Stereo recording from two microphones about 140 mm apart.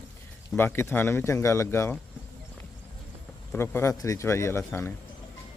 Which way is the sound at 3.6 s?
15° left (ahead or behind).